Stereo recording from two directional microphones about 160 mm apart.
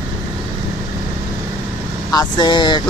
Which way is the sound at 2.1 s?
25° left (ahead or behind).